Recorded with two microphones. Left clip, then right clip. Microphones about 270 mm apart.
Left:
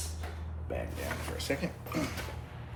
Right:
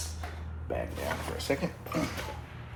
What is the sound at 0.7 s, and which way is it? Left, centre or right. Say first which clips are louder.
Speech: right 4 dB; centre.